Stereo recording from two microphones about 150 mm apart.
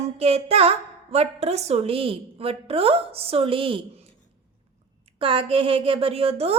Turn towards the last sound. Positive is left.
turn(degrees=-40)  # may be behind; listen again after turning